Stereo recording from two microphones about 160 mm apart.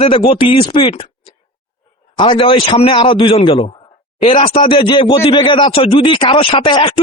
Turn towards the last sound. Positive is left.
turn(degrees=35)  # may be behind; listen again after turning